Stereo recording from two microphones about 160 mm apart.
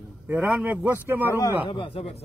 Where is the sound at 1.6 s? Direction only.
35° left (ahead or behind).